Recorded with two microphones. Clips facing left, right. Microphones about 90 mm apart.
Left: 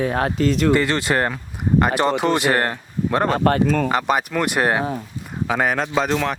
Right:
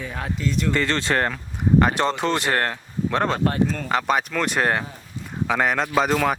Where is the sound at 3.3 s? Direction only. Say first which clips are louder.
Left 5 dB; 70° left (ahead or behind).